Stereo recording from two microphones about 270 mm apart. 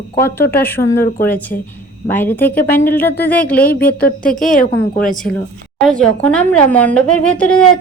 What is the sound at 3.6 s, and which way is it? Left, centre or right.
A woman's voice, left.